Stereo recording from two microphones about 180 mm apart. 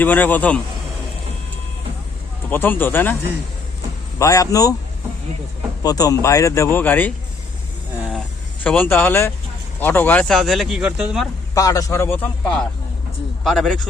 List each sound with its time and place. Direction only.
0.0 s a man's voice: 10° left (ahead or behind)
2.5 s a man's voice: 10° left (ahead or behind)
4.2 s speech: 20° left (ahead or behind)
5.8 s a man's voice: 20° left (ahead or behind)
8.6 s a man's voice: 10° left (ahead or behind)
11.5 s a man's voice: 20° left (ahead or behind); by 13.8 s 5° left (ahead or behind)